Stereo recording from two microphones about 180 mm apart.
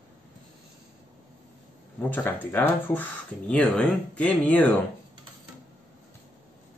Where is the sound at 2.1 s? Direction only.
10° left (ahead or behind).